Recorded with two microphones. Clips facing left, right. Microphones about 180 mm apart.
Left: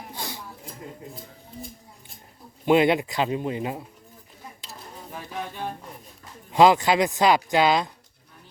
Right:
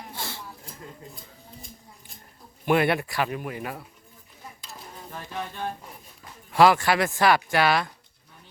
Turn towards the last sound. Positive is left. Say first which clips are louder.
# left 2 dB
turn(degrees=20)  # may be behind; listen again after turning